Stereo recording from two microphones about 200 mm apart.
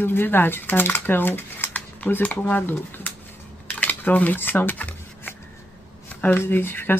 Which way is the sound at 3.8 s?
10° left (ahead or behind).